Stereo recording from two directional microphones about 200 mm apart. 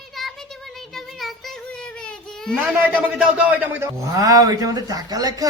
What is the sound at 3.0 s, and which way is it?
A man's voice, 5° right (ahead or behind).